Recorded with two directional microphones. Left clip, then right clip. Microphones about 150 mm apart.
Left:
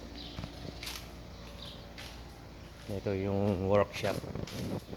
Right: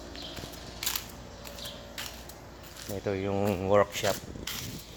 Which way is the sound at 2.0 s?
90° right.